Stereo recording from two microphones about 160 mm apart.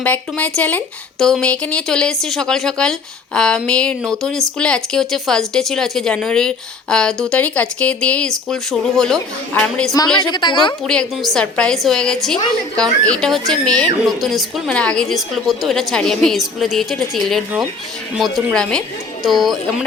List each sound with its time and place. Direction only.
0.0 s a woman's voice: 10° left (ahead or behind)
10.2 s a woman's voice: 30° left (ahead or behind)
10.8 s a woman's voice: centre (ahead or behind)
18.5 s a woman's voice: 5° left (ahead or behind)